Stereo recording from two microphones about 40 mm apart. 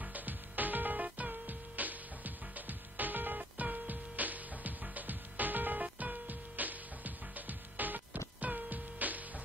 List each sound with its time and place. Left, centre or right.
0.0 s music: right